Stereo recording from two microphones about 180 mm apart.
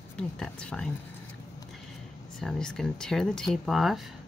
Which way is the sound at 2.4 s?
5° left (ahead or behind).